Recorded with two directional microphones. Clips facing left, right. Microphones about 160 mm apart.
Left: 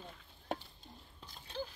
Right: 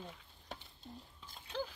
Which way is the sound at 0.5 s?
50° left (ahead or behind).